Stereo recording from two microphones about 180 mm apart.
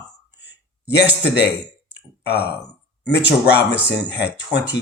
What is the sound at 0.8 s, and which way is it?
Speech, 70° left (ahead or behind).